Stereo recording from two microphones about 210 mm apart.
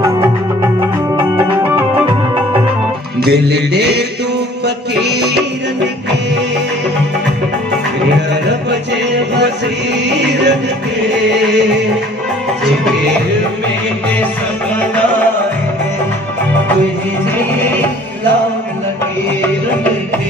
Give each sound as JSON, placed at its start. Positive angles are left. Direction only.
{"t": 1.1, "sound": "music", "side_deg": -15}
{"t": 3.3, "sound": "music", "side_deg": -50}
{"t": 10.0, "sound": "music", "side_deg": -55}